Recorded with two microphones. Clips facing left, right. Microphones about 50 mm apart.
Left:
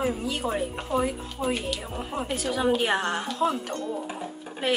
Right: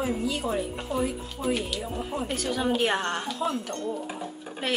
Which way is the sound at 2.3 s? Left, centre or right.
Centre.